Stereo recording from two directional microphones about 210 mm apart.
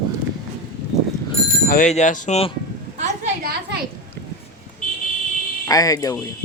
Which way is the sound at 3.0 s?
45° right (ahead or behind).